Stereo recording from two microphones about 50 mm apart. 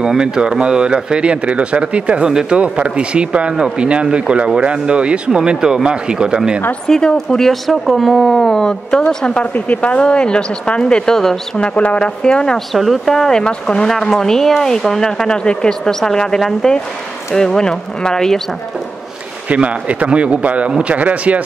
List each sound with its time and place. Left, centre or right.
0.0 s speech: centre
6.9 s speech: centre
9.0 s a woman's voice: left
12.7 s speech: centre
19.5 s speech: right